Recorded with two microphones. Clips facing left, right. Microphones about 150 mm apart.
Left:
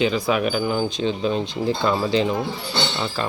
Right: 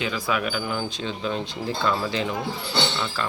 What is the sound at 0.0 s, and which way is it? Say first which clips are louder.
Speech: left 6 dB; 25° left (ahead or behind).